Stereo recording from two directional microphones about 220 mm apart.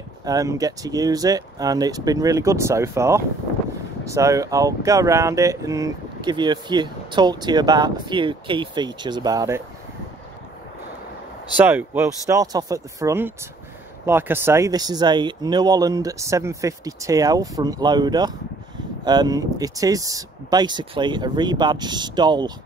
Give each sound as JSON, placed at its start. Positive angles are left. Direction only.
{"t": 0.2, "sound": "speech", "side_deg": -15}
{"t": 11.5, "sound": "speech", "side_deg": -10}